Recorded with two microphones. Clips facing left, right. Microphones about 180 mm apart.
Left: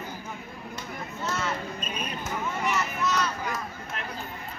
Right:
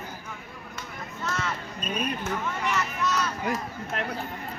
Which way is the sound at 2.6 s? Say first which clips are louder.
Even; 5° left (ahead or behind).